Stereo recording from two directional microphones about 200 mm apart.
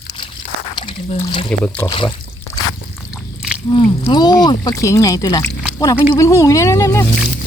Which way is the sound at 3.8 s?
25° left (ahead or behind).